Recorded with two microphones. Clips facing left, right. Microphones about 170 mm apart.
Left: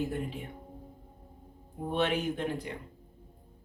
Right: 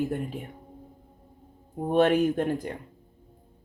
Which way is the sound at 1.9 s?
45° right (ahead or behind).